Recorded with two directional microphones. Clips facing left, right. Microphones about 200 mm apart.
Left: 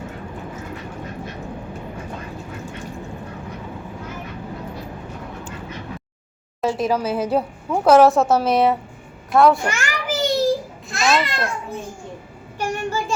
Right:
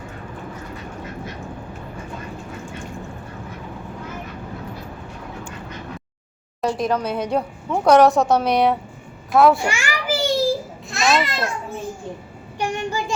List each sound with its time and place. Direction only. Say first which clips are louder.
6.6 s a woman's voice: left 1 dB; 5° left (ahead or behind)
9.6 s a sound: right 1 dB; 10° right (ahead or behind)
10.8 s babbling: even; centre (ahead or behind)
12.5 s child singing: even; 15° right (ahead or behind)